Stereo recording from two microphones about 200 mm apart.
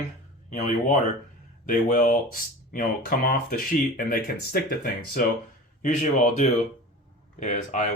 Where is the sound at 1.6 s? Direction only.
40° left (ahead or behind).